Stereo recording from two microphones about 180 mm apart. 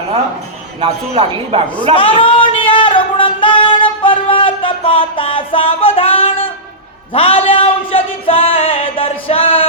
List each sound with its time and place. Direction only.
0.8 s a man's voice: 30° right (ahead or behind)
2.0 s singing: 30° left (ahead or behind)
7.1 s music: 30° left (ahead or behind)